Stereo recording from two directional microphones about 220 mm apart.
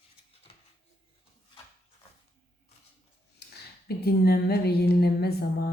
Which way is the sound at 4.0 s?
45° left (ahead or behind).